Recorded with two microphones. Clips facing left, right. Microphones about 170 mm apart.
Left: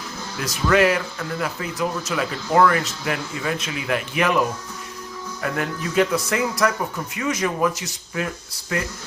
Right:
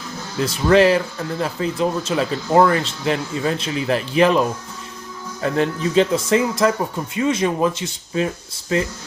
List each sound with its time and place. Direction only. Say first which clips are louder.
0.3 s speech: right 4 dB; 30° right (ahead or behind)